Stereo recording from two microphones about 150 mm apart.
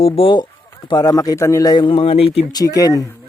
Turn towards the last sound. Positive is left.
turn(degrees=20)  # may be behind; listen again after turning